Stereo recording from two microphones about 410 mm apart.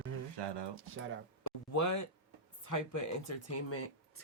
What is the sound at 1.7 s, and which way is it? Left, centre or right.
Speech, left.